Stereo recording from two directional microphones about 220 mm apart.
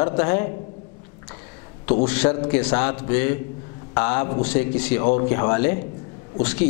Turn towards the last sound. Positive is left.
turn(degrees=10)  # may be behind; listen again after turning